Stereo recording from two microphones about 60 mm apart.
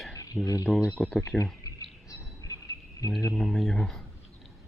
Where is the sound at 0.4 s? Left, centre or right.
Left.